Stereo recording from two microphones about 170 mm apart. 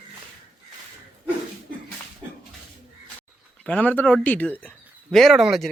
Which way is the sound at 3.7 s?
10° left (ahead or behind).